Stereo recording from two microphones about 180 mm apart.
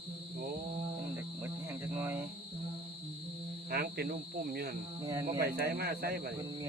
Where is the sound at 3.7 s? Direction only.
60° right (ahead or behind).